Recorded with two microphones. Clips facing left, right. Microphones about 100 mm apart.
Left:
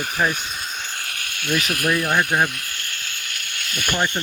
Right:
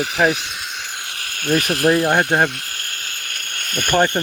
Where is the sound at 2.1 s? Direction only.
45° right (ahead or behind).